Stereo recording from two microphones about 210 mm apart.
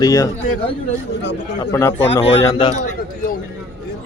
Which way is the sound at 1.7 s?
15° left (ahead or behind).